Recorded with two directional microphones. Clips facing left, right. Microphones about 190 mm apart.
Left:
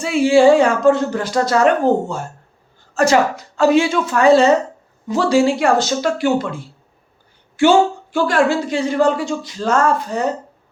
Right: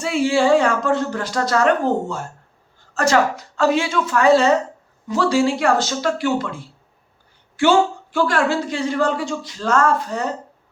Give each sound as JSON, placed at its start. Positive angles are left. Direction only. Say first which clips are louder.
{"t": 0.0, "sound": "speech", "louder": "left 6 dB", "side_deg": 10}
{"t": 8.1, "sound": "speech", "louder": "left 3 dB", "side_deg": 15}